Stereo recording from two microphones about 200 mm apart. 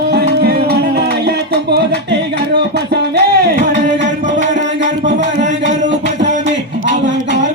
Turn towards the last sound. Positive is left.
turn(degrees=-40)  # may be behind; listen again after turning